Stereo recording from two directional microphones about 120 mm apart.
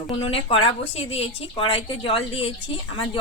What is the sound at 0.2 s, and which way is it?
A woman's voice, 55° left (ahead or behind).